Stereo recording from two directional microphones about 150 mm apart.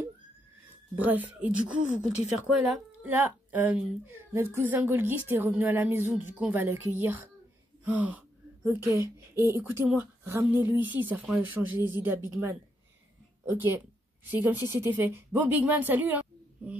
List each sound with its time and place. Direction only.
0.9 s a woman's voice: 10° right (ahead or behind)
3.0 s a woman's voice: 10° right (ahead or behind)
7.8 s gasp: 10° right (ahead or behind)
8.6 s a woman's voice: 15° right (ahead or behind)